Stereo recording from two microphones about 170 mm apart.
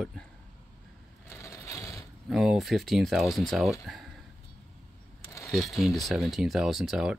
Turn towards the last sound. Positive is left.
turn(degrees=-5)  # may be behind; listen again after turning